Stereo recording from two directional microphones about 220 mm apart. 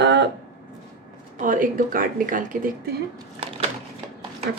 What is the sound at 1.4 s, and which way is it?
Speech, 40° right (ahead or behind).